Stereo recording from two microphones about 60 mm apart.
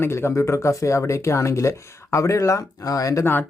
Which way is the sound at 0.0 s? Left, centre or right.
Left.